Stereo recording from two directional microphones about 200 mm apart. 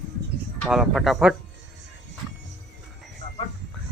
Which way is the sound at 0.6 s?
Centre (ahead or behind).